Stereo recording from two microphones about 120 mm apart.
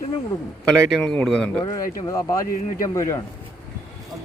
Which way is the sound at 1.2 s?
10° left (ahead or behind).